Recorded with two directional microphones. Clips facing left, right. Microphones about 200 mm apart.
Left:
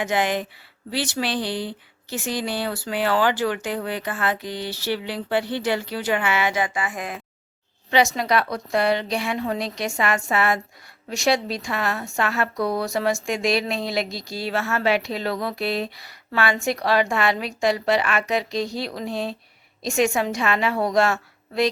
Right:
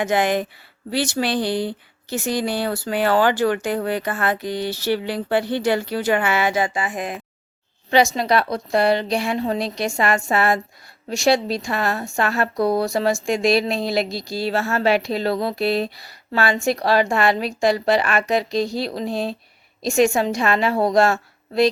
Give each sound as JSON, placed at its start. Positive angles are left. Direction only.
{"t": 0.0, "sound": "speech", "side_deg": -45}
{"t": 7.9, "sound": "a woman's voice", "side_deg": -35}